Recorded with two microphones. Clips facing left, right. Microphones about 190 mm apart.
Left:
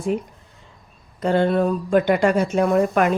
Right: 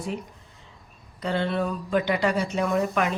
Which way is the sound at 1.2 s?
50° left (ahead or behind).